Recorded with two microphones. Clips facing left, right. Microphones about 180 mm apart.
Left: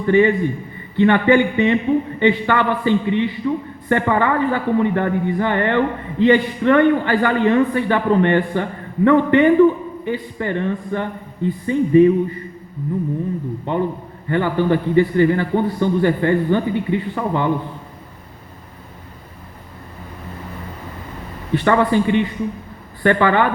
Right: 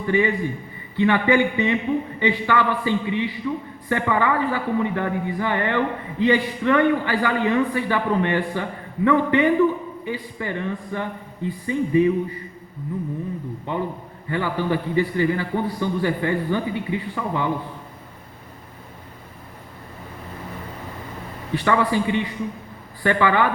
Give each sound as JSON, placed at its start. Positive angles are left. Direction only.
{"t": 0.0, "sound": "a man's voice", "side_deg": 55}
{"t": 13.7, "sound": "a man's voice", "side_deg": 55}
{"t": 21.5, "sound": "a man's voice", "side_deg": 55}